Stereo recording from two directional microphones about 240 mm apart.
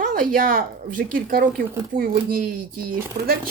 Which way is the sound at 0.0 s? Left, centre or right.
Right.